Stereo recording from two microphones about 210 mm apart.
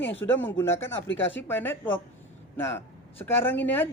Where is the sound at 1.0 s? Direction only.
65° left (ahead or behind).